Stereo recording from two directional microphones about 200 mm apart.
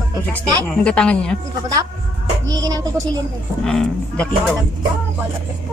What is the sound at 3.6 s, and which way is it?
Speech, centre (ahead or behind).